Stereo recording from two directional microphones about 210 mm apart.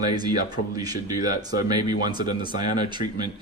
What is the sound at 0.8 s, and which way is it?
Speech, 20° right (ahead or behind).